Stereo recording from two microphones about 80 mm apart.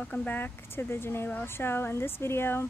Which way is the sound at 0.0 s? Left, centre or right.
Centre.